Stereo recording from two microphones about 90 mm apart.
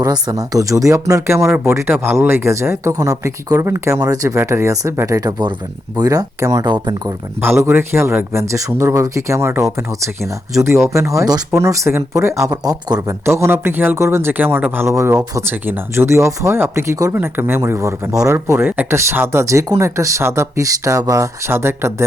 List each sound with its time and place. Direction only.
0.0 s speech: 45° right (ahead or behind)
6.7 s speech: 50° right (ahead or behind)
7.4 s speech: 25° right (ahead or behind); by 13.1 s 45° right (ahead or behind)
13.2 s a man's voice: 30° right (ahead or behind)
17.2 s a man's voice: 20° right (ahead or behind)